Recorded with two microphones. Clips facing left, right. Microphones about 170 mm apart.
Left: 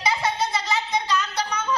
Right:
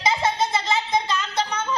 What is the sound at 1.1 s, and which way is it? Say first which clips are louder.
Music: even; 25° right (ahead or behind).